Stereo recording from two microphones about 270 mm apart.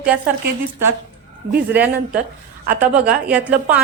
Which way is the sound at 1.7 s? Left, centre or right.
Centre.